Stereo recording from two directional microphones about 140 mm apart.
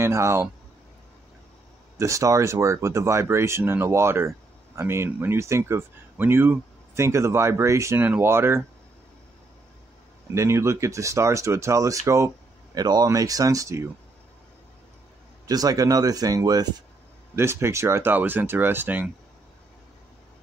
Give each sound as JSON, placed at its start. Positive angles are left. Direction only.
{"t": 0.0, "sound": "speech", "side_deg": -20}
{"t": 2.0, "sound": "speech", "side_deg": -20}
{"t": 10.3, "sound": "speech", "side_deg": -20}
{"t": 15.4, "sound": "speech", "side_deg": -25}